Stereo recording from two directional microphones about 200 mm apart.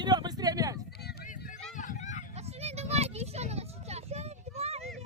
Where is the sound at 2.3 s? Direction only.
30° right (ahead or behind).